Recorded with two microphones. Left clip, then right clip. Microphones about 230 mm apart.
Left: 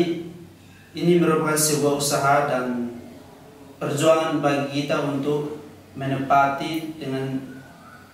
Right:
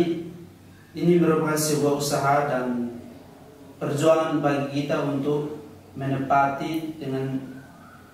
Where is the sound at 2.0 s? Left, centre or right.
Centre.